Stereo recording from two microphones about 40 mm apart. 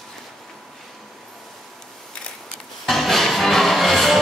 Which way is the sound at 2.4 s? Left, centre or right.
Centre.